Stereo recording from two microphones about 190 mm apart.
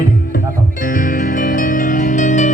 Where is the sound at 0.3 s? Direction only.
45° left (ahead or behind).